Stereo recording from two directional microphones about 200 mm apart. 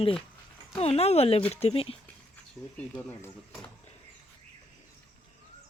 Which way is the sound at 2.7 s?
10° left (ahead or behind).